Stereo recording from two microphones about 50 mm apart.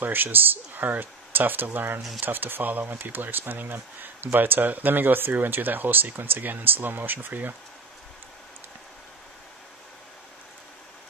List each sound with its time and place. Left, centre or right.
0.0 s speech: right